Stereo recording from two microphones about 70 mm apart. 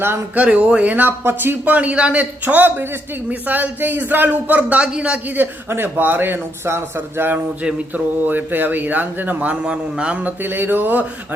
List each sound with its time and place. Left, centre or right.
0.3 s speech: centre
5.6 s a man's voice: right; by 10.3 s centre
10.4 s speech: right